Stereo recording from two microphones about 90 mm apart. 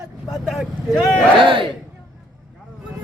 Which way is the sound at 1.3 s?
70° right (ahead or behind).